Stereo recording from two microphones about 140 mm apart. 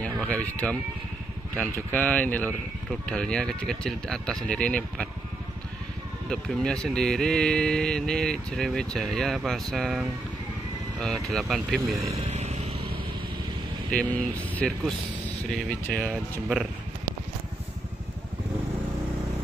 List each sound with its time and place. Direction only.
0.0 s speech: 10° left (ahead or behind)
6.2 s speech: 5° left (ahead or behind)
11.9 s vehicle: 40° right (ahead or behind)
13.9 s speech: 10° left (ahead or behind)